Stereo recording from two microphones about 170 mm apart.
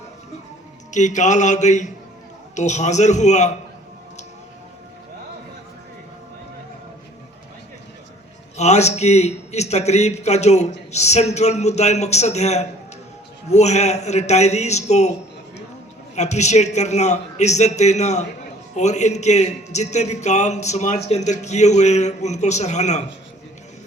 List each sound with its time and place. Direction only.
0.9 s a man's voice: 45° left (ahead or behind)
8.5 s a man's voice: 40° left (ahead or behind)
16.1 s a man's voice: 45° left (ahead or behind)